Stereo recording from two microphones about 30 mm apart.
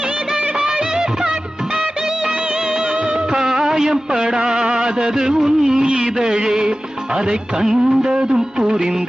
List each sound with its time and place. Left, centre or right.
0.6 s music: right
2.9 s music: right
3.4 s a sound: centre
6.3 s music: right